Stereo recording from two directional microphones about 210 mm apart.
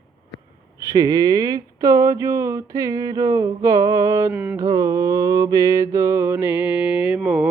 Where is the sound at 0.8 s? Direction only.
15° right (ahead or behind).